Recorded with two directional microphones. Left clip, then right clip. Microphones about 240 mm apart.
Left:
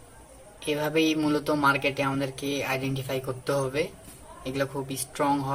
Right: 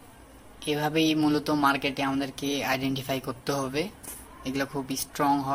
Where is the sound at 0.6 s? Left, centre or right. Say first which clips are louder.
Left 1 dB; right.